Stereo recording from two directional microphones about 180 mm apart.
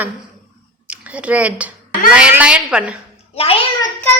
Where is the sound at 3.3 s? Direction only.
35° left (ahead or behind).